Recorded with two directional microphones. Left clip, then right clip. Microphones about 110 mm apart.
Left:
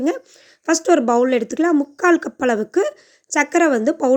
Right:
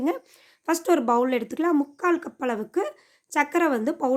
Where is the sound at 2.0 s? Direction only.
40° left (ahead or behind).